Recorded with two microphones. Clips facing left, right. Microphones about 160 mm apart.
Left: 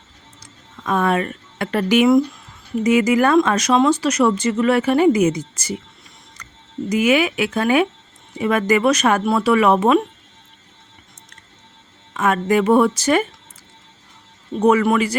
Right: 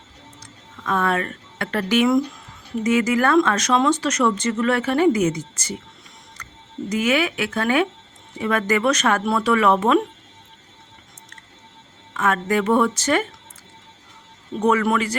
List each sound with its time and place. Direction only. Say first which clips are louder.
0.9 s speech: left 3 dB; 15° left (ahead or behind)
6.9 s speech: left 4 dB; 15° left (ahead or behind)
12.1 s speech: left 3 dB; 15° left (ahead or behind)
14.6 s speech: left 4 dB; 10° left (ahead or behind)